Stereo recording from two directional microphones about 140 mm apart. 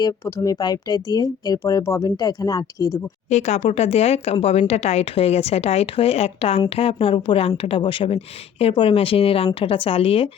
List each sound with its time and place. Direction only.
0.0 s speech: 25° left (ahead or behind)
3.2 s speech: 55° left (ahead or behind)